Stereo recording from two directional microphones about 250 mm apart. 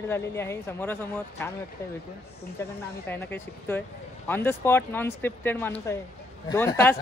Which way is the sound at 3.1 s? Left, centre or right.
Centre.